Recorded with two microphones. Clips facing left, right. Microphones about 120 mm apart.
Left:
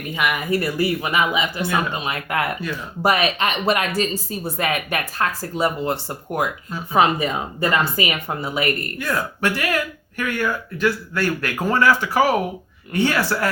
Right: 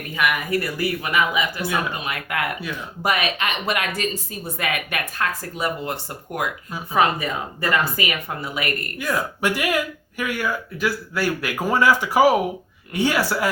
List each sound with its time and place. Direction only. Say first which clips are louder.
0.1 s speech: left 1 dB; 20° left (ahead or behind)
9.0 s speech: even; 5° right (ahead or behind)